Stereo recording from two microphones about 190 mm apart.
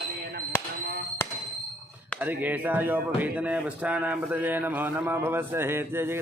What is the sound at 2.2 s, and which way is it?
A man's voice, 10° right (ahead or behind).